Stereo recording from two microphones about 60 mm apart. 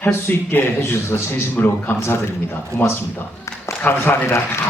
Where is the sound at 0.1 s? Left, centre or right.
Left.